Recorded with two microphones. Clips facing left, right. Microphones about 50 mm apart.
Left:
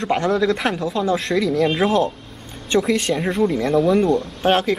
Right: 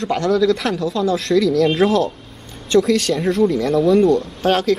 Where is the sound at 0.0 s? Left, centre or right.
Left.